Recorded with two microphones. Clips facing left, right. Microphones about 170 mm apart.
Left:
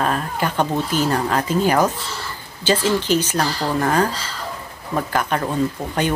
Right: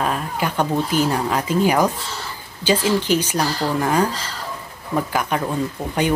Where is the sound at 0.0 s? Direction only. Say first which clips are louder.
Left 1 dB; 5° right (ahead or behind).